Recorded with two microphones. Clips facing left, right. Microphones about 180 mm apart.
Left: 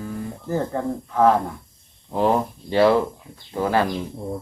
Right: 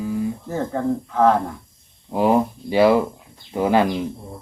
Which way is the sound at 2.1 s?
10° right (ahead or behind).